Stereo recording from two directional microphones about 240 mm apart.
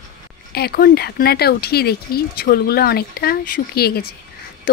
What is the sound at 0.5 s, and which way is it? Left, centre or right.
Speech, left.